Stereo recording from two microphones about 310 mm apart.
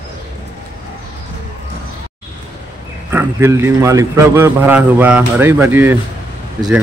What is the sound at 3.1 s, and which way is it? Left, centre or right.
A man's voice, centre.